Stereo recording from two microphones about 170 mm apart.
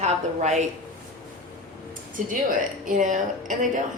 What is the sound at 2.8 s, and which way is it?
Speech, 50° right (ahead or behind).